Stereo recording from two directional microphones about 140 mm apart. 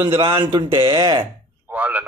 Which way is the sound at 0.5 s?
35° right (ahead or behind).